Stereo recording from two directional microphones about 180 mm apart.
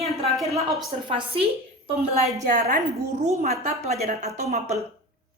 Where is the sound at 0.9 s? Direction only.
30° right (ahead or behind).